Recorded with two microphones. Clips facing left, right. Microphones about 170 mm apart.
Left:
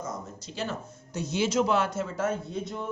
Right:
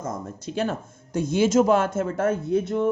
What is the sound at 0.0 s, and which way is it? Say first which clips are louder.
Speech: right 5 dB; 50° right (ahead or behind).